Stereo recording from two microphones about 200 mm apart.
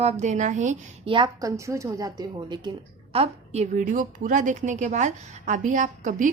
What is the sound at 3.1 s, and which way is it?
A woman's voice, 30° right (ahead or behind).